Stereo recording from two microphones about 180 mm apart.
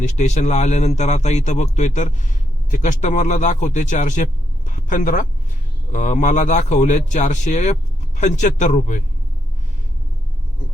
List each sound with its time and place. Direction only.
0.0 s a man's voice: 40° left (ahead or behind)